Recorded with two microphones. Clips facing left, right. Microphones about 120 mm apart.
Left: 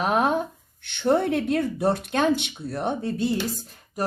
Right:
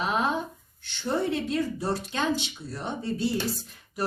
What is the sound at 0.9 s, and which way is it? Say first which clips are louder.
Speech: left 6 dB; 60° left (ahead or behind).